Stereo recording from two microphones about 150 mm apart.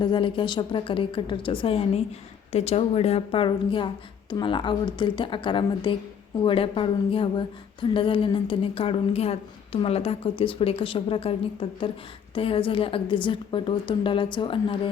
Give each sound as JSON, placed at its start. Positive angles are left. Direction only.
{"t": 0.0, "sound": "a woman's voice", "side_deg": 30}